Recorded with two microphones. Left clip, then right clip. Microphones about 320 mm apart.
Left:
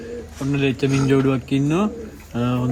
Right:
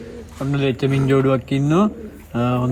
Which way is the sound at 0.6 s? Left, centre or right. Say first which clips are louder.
Even; right.